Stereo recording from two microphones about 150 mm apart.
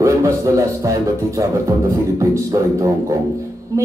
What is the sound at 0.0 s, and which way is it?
Speech, 20° right (ahead or behind).